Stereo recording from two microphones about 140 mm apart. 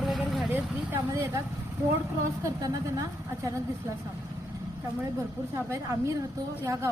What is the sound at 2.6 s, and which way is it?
Speech, 25° right (ahead or behind).